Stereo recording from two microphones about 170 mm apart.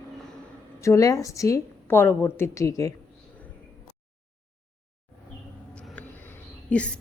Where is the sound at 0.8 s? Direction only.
20° left (ahead or behind).